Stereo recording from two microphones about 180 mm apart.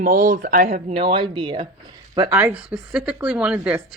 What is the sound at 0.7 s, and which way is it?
Speech, 40° right (ahead or behind).